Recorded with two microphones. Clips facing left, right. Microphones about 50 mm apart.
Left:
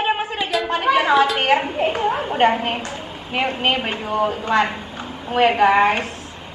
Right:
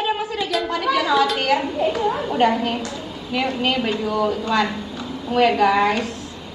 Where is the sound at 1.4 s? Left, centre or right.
Left.